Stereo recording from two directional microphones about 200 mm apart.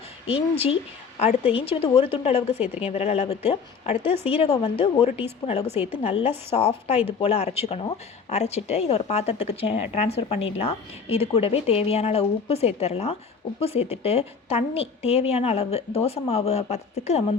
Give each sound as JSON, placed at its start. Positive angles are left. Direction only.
{"t": 0.3, "sound": "a woman's voice", "side_deg": 30}
{"t": 5.7, "sound": "a woman's voice", "side_deg": -10}
{"t": 6.0, "sound": "speech", "side_deg": 30}